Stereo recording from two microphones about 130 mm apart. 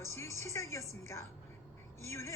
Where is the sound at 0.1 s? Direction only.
20° left (ahead or behind).